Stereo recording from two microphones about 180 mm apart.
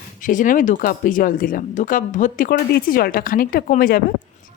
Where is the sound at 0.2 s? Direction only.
45° left (ahead or behind).